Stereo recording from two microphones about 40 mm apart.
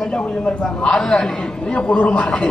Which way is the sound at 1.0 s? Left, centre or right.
Centre.